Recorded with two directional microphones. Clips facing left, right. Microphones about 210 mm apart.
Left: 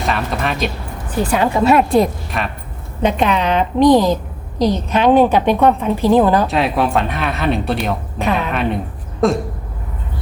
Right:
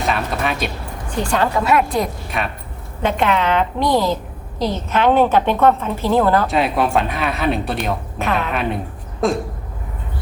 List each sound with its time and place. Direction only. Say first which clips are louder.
0.0 s speech: left 1 dB; centre (ahead or behind)
1.5 s a woman's voice: left 8 dB; 25° left (ahead or behind)
2.3 s speech: even; centre (ahead or behind)
3.0 s a woman's voice: left 2 dB; 20° left (ahead or behind)
6.5 s speech: left 1 dB; centre (ahead or behind)
9.2 s speech: left 3 dB; centre (ahead or behind)